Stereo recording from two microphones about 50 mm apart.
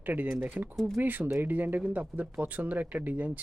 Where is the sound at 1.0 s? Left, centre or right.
Right.